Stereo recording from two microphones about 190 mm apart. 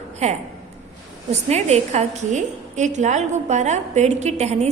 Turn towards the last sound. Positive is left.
turn(degrees=-35)  # may be behind; listen again after turning